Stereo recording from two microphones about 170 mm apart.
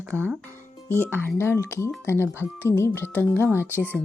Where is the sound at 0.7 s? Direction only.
15° left (ahead or behind).